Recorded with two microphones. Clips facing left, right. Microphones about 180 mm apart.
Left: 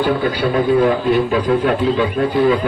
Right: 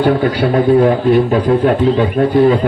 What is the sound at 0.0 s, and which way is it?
A man's voice, 55° right (ahead or behind).